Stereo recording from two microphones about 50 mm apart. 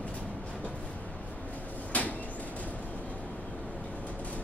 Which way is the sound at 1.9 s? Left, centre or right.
Left.